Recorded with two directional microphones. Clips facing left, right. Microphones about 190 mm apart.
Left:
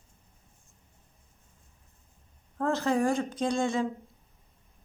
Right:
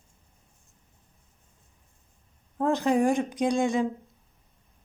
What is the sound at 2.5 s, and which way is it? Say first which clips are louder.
A woman's voice: right 3 dB; 15° right (ahead or behind).